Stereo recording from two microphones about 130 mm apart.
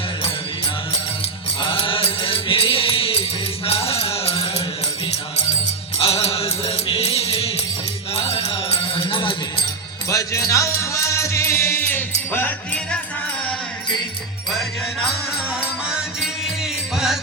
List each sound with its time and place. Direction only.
1.6 s music: 45° left (ahead or behind)
6.0 s music: 50° left (ahead or behind)
10.1 s music: 25° left (ahead or behind); by 13.0 s 10° left (ahead or behind)